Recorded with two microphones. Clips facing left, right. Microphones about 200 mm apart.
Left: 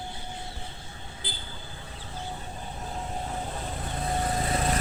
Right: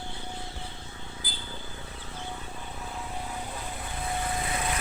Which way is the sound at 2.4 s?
40° left (ahead or behind).